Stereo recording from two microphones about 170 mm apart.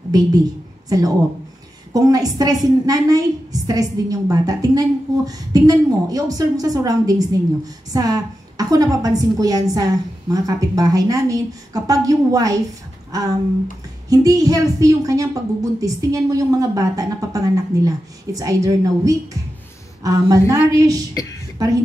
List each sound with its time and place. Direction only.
0.1 s a woman's voice: 20° right (ahead or behind)